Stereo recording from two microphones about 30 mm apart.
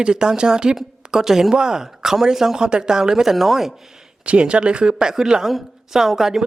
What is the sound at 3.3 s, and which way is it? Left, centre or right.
Speech, centre.